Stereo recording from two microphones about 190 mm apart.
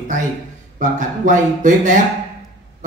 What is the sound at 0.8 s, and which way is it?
A man's voice, 40° right (ahead or behind).